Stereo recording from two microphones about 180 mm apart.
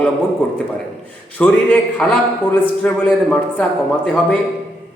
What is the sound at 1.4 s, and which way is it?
A man's voice, 10° left (ahead or behind).